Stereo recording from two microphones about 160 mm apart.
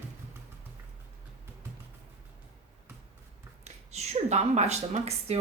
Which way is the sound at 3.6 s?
45° right (ahead or behind).